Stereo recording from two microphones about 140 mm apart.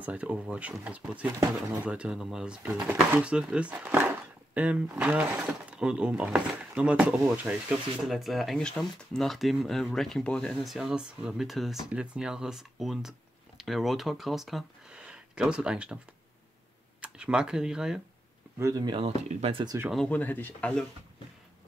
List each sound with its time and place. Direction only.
0.0 s speech: 10° right (ahead or behind)
17.0 s speech: 5° right (ahead or behind)
18.6 s speech: 25° right (ahead or behind)
18.9 s speech: 45° right (ahead or behind)
20.1 s speech: 10° left (ahead or behind)